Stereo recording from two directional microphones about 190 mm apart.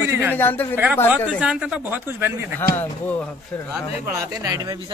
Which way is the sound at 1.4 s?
5° right (ahead or behind).